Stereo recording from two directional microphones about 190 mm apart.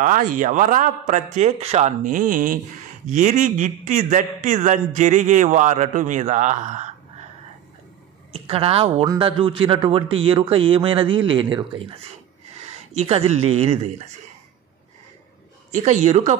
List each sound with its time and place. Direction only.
0.0 s a man's voice: 45° right (ahead or behind)
8.3 s speech: 30° right (ahead or behind)
15.7 s a man's voice: 40° right (ahead or behind)